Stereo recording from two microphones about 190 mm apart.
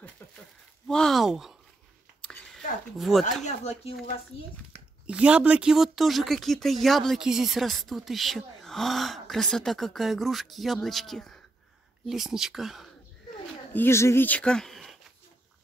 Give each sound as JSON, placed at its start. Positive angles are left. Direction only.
{"t": 0.8, "sound": "speech", "side_deg": 0}
{"t": 2.2, "sound": "a sound", "side_deg": 5}
{"t": 3.4, "sound": "speech", "side_deg": 35}
{"t": 5.0, "sound": "speech", "side_deg": -5}
{"t": 13.7, "sound": "speech", "side_deg": 15}